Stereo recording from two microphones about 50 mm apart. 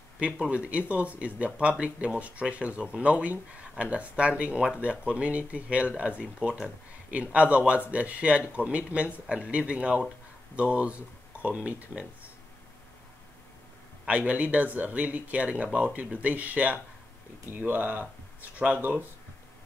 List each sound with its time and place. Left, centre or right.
0.2 s speech: right
14.0 s speech: right